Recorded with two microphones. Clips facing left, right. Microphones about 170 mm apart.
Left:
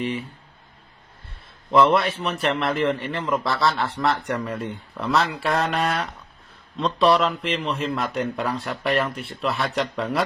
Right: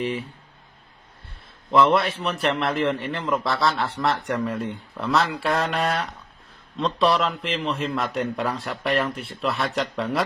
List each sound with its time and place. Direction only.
1.9 s a man's voice: centre (ahead or behind)
5.5 s speech: 35° right (ahead or behind)
6.7 s a man's voice: centre (ahead or behind)